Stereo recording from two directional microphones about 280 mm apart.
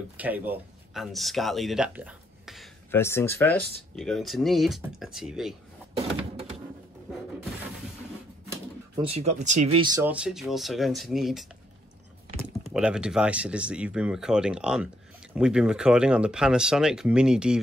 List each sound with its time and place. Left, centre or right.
0.2 s speech: centre
5.9 s a sound: right
8.5 s speech: centre